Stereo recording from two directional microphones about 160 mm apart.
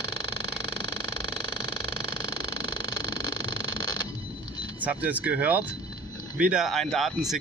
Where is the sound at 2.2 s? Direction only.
25° left (ahead or behind).